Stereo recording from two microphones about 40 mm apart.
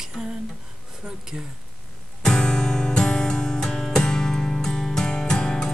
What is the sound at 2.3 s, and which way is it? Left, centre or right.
Music, centre.